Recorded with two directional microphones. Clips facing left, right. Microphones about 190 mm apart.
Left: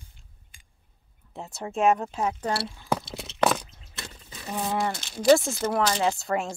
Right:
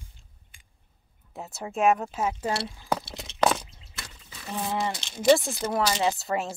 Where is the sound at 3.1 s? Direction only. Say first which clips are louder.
Right 1 dB; centre (ahead or behind).